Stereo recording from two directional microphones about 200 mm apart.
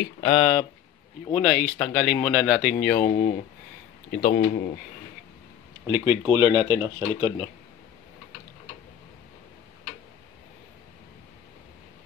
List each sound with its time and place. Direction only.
0.3 s speech: 5° left (ahead or behind)
3.0 s speech: 35° left (ahead or behind)
4.1 s speech: 45° left (ahead or behind)
4.5 s speech: 35° left (ahead or behind)
5.9 s speech: 15° right (ahead or behind)